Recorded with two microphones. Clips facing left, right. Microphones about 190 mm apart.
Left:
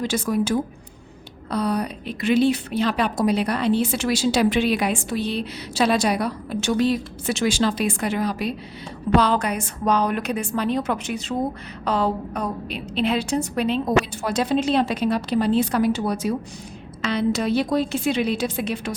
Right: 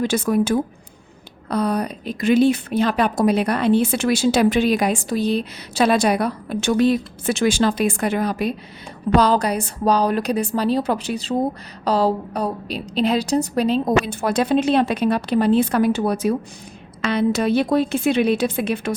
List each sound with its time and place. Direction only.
0.0 s a woman's voice: 55° right (ahead or behind)
9.1 s a woman's voice: 40° right (ahead or behind); by 18.9 s 55° right (ahead or behind)